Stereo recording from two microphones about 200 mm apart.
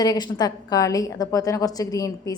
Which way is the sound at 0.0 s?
20° left (ahead or behind).